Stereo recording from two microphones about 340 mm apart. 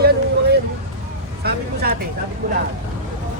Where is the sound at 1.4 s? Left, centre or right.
Right.